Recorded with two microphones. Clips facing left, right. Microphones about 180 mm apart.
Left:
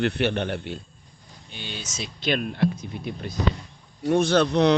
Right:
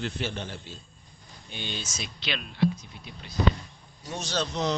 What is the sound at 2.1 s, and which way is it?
Speech, 50° left (ahead or behind).